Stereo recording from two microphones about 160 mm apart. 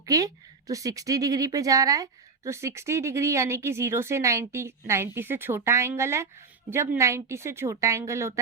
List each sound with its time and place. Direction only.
0.0 s a woman's voice: 20° right (ahead or behind)